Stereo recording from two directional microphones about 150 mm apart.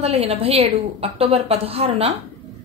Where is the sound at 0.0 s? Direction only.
45° right (ahead or behind).